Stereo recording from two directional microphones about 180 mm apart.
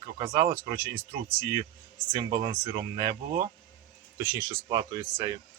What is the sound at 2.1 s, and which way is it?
Speech, 25° right (ahead or behind).